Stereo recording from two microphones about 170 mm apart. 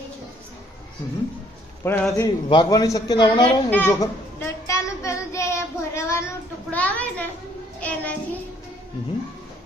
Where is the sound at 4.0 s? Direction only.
15° left (ahead or behind).